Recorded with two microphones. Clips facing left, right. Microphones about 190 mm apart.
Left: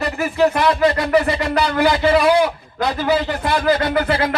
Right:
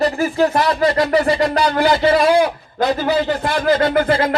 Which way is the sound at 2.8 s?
45° right (ahead or behind).